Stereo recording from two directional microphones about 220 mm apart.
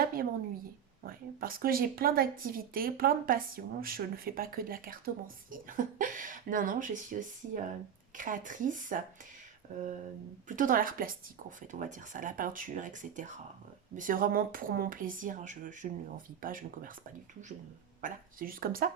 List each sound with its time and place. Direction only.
0.0 s a sound: 40° right (ahead or behind)
1.0 s a woman's voice: 40° right (ahead or behind)
10.5 s a woman's voice: 35° right (ahead or behind)
18.0 s a woman's voice: 40° right (ahead or behind)